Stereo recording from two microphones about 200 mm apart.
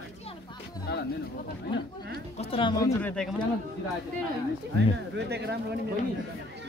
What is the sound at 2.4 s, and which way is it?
Speech, 25° left (ahead or behind).